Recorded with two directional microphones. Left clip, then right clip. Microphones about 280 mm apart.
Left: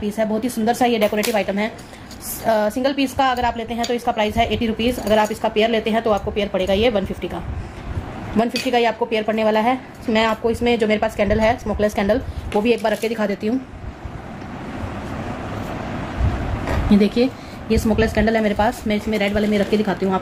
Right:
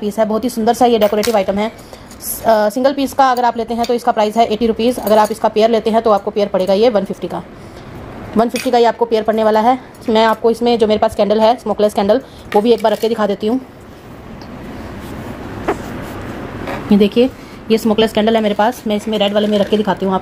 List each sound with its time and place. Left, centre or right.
0.0 s a woman's voice: right
16.9 s a woman's voice: centre
17.6 s a woman's voice: right
18.2 s a woman's voice: centre
19.5 s a woman's voice: right